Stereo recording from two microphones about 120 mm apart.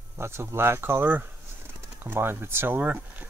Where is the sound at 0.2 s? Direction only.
20° right (ahead or behind).